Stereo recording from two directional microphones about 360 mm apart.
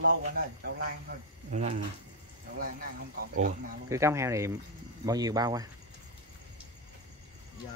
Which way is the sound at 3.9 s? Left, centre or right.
Centre.